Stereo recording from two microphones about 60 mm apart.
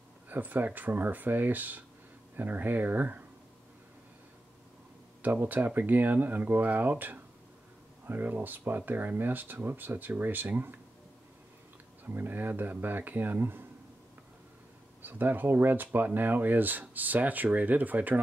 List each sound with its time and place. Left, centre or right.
0.3 s speech: right
5.2 s speech: right
12.0 s speech: right
15.0 s speech: right